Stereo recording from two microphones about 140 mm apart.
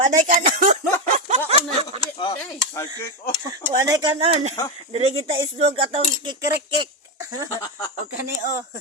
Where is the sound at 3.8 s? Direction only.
30° right (ahead or behind); by 6.0 s 45° right (ahead or behind).